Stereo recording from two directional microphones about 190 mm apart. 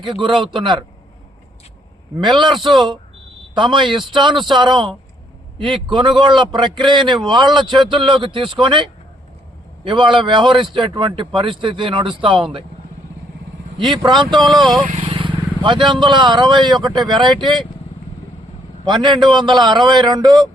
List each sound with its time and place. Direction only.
0.0 s speech: 25° right (ahead or behind)
3.5 s speech: 25° right (ahead or behind)
7.0 s speech: centre (ahead or behind)
7.3 s speech: 25° right (ahead or behind)
13.7 s speech: 25° right (ahead or behind)
14.3 s speech: centre (ahead or behind)
15.1 s vehicle: 25° right (ahead or behind)
15.9 s speech: 25° right (ahead or behind)
18.9 s speech: 25° right (ahead or behind)